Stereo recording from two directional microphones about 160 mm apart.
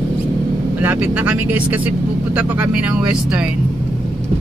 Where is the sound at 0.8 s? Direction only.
10° right (ahead or behind).